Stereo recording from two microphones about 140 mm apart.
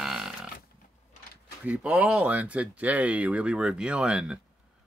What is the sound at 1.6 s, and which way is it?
Speech, 10° right (ahead or behind).